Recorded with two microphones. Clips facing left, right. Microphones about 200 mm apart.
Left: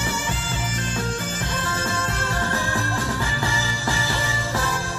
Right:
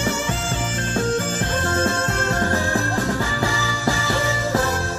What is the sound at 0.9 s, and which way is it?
Music, 50° right (ahead or behind).